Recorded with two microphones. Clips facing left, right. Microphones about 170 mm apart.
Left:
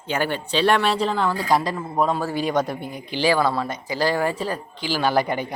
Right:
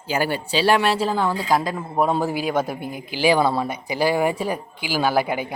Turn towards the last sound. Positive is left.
turn(degrees=-5)  # may be behind; listen again after turning